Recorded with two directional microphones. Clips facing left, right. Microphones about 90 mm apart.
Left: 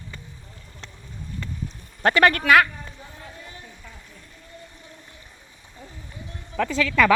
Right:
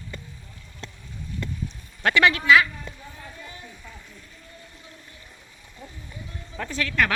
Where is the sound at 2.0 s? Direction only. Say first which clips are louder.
Left 2 dB; 40° left (ahead or behind).